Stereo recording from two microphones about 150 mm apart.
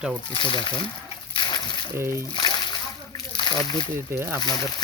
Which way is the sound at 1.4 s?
30° left (ahead or behind).